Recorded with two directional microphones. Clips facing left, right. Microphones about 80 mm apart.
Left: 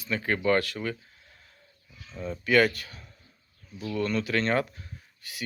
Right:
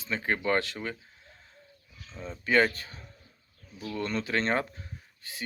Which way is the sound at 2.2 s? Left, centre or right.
Right.